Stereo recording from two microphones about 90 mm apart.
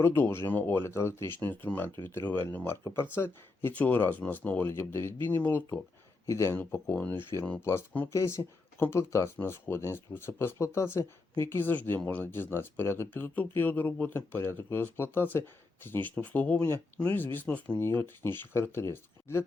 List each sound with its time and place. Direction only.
0.0 s speech: 25° left (ahead or behind)